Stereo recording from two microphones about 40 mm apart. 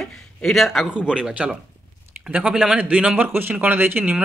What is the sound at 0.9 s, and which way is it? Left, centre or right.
Speech, right.